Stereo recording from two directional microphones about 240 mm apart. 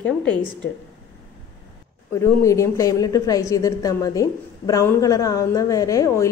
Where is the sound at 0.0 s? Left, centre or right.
Centre.